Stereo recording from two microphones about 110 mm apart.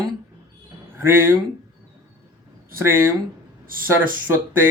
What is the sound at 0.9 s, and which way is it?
Speech, 20° right (ahead or behind).